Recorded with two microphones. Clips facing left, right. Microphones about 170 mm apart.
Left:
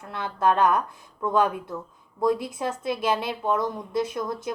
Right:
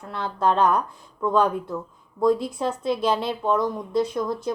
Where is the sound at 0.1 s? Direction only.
15° left (ahead or behind).